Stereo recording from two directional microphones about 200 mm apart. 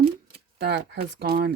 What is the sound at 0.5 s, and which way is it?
Speech, 55° right (ahead or behind).